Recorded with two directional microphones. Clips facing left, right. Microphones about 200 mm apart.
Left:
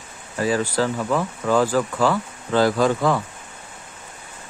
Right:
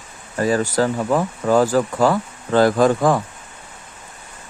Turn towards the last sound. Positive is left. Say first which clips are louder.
# right 3 dB
turn(degrees=-45)  # may be behind; listen again after turning